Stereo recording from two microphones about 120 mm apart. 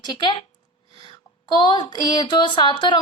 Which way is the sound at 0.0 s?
40° left (ahead or behind).